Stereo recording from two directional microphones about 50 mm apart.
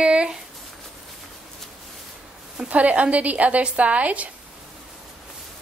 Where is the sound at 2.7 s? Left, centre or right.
Right.